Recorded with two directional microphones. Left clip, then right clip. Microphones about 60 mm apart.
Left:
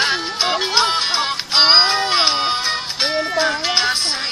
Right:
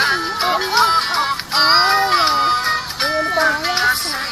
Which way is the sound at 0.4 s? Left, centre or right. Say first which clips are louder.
Right 1 dB; centre.